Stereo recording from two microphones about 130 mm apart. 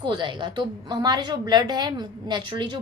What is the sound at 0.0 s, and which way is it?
A woman's voice, 35° right (ahead or behind).